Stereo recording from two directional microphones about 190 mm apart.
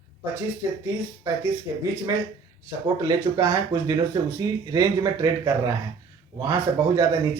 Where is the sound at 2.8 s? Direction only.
20° right (ahead or behind).